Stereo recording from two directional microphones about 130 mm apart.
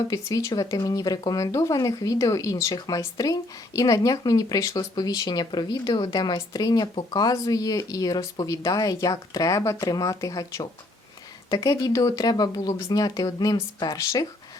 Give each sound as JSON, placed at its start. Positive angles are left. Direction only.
{"t": 0.1, "sound": "speech", "side_deg": 25}